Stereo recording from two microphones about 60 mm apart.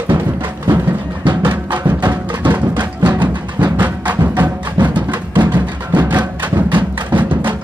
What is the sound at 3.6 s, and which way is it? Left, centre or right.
Music, right.